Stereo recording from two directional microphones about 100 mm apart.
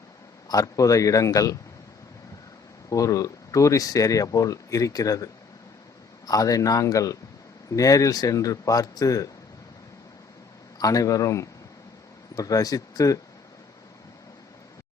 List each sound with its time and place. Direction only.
0.4 s speech: 35° left (ahead or behind)
2.9 s speech: 35° left (ahead or behind)
10.8 s speech: 35° left (ahead or behind)